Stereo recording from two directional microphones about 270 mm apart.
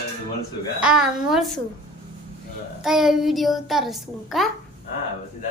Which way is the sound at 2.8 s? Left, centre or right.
Centre.